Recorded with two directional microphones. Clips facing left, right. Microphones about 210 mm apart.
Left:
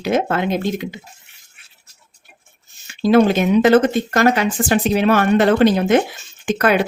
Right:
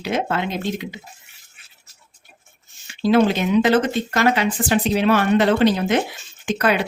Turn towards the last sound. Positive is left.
turn(degrees=50)  # may be behind; listen again after turning